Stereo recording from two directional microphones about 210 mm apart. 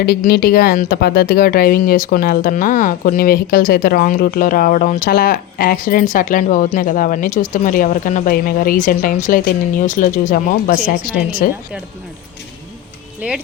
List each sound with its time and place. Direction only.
0.0 s a woman's voice: 45° left (ahead or behind)
13.2 s speech: 5° right (ahead or behind)